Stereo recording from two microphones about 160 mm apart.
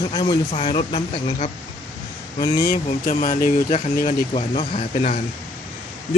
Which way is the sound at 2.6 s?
55° left (ahead or behind).